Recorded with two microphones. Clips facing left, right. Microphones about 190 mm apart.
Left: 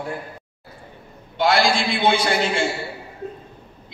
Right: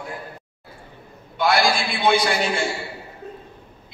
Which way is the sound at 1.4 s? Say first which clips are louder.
Left 1 dB; 30° left (ahead or behind).